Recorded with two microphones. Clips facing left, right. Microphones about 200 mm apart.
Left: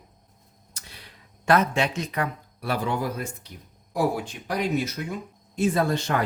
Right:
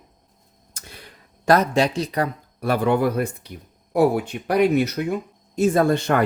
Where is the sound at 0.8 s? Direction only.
50° right (ahead or behind).